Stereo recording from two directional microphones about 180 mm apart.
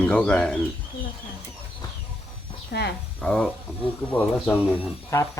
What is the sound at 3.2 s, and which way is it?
Speech, 5° left (ahead or behind).